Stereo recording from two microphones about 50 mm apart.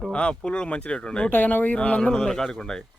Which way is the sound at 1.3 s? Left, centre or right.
Left.